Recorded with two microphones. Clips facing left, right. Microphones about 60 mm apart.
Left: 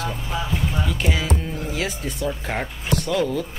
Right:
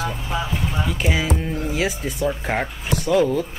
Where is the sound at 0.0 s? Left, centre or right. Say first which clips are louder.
Right 2 dB; centre.